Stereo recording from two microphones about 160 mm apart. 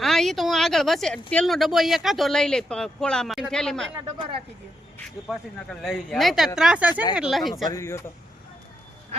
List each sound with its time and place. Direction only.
0.0 s speech: centre (ahead or behind)
4.0 s speech: 30° right (ahead or behind)
5.3 s speech: centre (ahead or behind)
7.7 s speech: 20° left (ahead or behind)